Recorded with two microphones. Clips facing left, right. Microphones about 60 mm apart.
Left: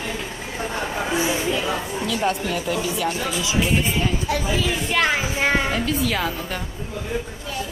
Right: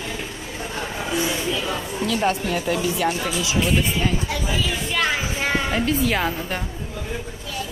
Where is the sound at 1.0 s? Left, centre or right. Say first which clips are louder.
Left 1 dB; left.